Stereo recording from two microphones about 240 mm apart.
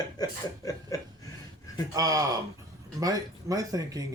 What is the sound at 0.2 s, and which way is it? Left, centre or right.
Speech, centre.